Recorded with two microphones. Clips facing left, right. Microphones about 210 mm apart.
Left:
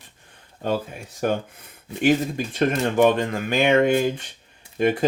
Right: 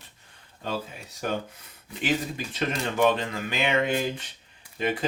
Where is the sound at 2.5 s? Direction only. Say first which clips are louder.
Left 7 dB; 50° left (ahead or behind).